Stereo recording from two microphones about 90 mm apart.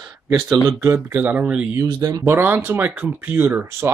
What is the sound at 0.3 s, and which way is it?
Speech, 35° right (ahead or behind).